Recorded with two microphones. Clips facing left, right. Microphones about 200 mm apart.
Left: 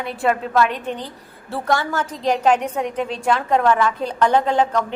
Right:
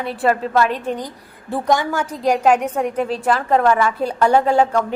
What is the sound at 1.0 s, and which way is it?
A woman's voice, 15° right (ahead or behind).